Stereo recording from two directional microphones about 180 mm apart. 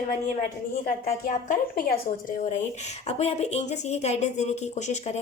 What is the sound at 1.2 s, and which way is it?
A woman's voice, 45° left (ahead or behind).